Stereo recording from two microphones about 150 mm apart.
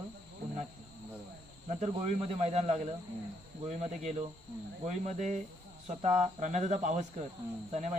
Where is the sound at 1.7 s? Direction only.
50° right (ahead or behind).